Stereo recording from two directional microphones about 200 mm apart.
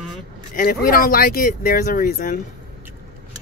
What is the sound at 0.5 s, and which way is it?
Speech, 45° left (ahead or behind).